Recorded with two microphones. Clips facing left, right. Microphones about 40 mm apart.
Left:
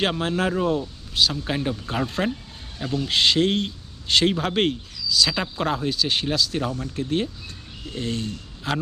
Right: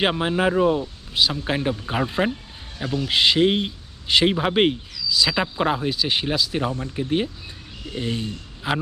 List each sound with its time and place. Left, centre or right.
0.0 s a man's voice: centre